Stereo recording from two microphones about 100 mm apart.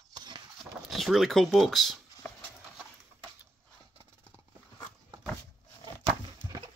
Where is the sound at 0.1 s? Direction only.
45° right (ahead or behind).